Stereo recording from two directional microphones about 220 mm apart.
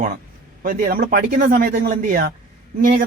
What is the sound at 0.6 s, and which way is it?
Speech, 40° right (ahead or behind).